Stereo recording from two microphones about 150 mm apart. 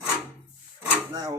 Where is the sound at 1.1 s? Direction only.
25° right (ahead or behind).